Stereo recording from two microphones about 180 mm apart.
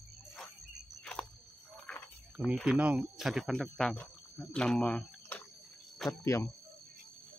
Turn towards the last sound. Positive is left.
turn(degrees=15)  # may be behind; listen again after turning